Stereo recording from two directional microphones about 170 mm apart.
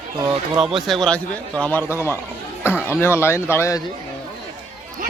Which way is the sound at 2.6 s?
10° right (ahead or behind).